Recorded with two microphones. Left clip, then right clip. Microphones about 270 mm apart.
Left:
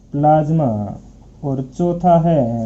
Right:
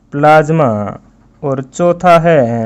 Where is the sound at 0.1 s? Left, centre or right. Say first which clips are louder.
Right 7 dB; right.